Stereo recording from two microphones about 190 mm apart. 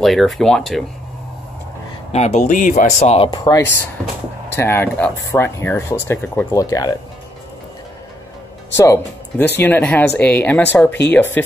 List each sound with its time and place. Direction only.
0.0 s speech: centre (ahead or behind)
2.1 s speech: 40° left (ahead or behind)
3.3 s speech: 20° left (ahead or behind)
8.7 s speech: 15° left (ahead or behind)